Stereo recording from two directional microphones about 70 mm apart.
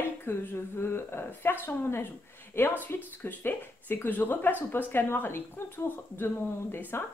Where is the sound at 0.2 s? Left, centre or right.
Left.